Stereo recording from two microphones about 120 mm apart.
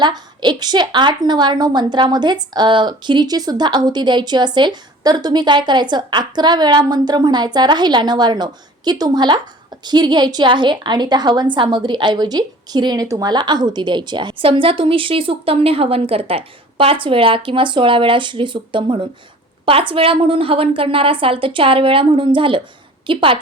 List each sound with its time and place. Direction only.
0.0 s a woman's voice: 35° right (ahead or behind)